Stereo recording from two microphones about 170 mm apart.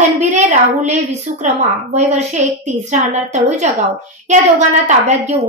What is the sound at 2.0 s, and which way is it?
A woman's voice, 40° right (ahead or behind).